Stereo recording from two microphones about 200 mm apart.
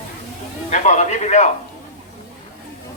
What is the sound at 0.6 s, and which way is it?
Speech, 35° left (ahead or behind).